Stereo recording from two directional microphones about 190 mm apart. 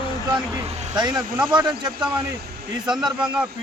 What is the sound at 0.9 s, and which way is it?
Speech, 20° right (ahead or behind).